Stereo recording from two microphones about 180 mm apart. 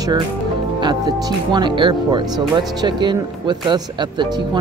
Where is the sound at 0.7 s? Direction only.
25° right (ahead or behind).